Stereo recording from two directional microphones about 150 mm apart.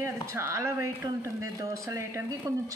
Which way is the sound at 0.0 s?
20° right (ahead or behind).